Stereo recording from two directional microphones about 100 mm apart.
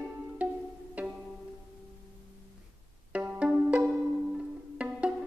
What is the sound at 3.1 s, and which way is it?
Pizzicato, 10° right (ahead or behind).